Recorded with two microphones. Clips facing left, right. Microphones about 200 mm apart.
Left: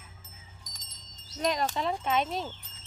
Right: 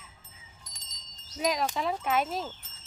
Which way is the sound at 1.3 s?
5° right (ahead or behind).